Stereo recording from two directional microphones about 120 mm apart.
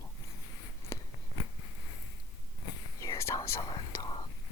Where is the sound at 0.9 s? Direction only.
25° left (ahead or behind).